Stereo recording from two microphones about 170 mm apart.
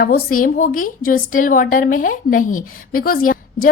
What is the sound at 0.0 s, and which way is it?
A woman's voice, 60° left (ahead or behind).